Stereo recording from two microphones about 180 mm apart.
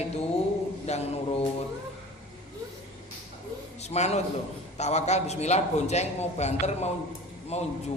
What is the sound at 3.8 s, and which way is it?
A man's voice, 35° left (ahead or behind).